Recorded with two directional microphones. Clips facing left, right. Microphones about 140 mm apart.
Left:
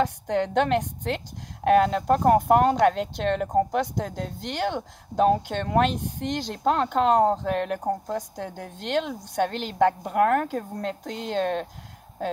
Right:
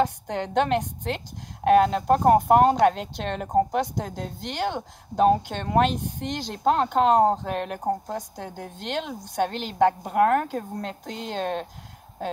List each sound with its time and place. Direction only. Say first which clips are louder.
0.0 s speech: left 1 dB; 30° right (ahead or behind)